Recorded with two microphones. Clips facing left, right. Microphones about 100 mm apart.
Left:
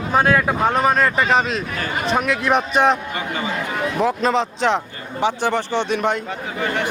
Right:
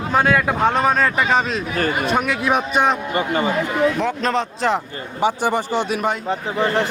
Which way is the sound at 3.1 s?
40° right (ahead or behind).